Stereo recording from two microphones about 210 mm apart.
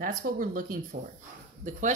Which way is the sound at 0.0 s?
40° right (ahead or behind).